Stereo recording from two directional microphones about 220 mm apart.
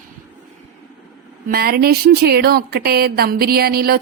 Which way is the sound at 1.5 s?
45° right (ahead or behind).